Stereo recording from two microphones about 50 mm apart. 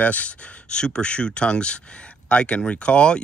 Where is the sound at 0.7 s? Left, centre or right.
Centre.